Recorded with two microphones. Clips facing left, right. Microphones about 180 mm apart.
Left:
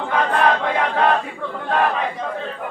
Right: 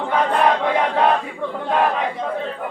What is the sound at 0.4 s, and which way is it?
Choir, 10° right (ahead or behind).